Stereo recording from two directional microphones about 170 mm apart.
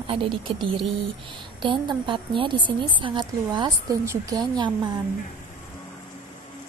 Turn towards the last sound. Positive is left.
turn(degrees=-25)  # may be behind; listen again after turning